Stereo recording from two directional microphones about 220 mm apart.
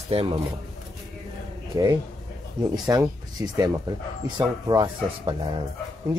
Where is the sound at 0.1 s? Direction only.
30° right (ahead or behind).